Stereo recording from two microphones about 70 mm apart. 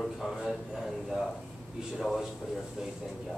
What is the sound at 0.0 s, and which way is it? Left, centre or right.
A man's voice, centre.